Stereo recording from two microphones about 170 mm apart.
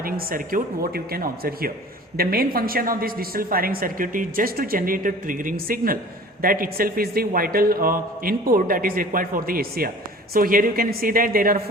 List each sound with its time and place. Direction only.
0.0 s a woman's voice: 60° right (ahead or behind)